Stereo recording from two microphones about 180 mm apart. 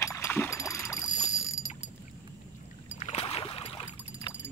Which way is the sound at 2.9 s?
30° left (ahead or behind).